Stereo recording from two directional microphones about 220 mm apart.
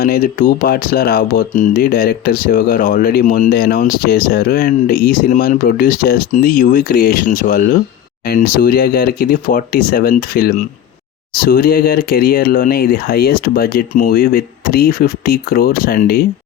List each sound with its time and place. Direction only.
0.0 s speech: 40° left (ahead or behind)